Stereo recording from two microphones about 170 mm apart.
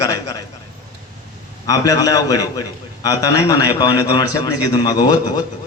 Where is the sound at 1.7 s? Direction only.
20° left (ahead or behind).